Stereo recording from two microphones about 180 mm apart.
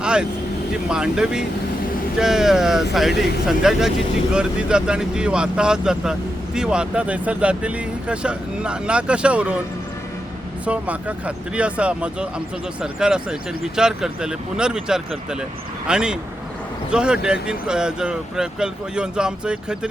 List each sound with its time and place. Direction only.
0.0 s vehicle: 5° right (ahead or behind)
0.9 s speech: 5° right (ahead or behind)
10.7 s speech: 5° right (ahead or behind)